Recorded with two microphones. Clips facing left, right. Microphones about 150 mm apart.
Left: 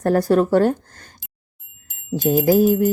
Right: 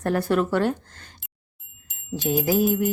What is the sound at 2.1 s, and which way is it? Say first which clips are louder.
Music: left 6 dB; 40° left (ahead or behind).